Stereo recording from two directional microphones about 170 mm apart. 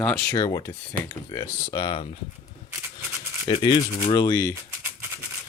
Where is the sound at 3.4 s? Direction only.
30° left (ahead or behind).